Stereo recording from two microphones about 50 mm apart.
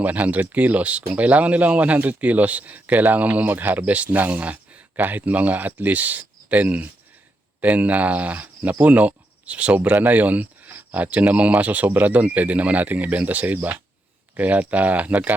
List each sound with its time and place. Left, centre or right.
0.0 s speech: right